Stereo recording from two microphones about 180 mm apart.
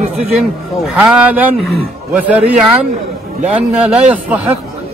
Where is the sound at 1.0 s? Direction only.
5° right (ahead or behind).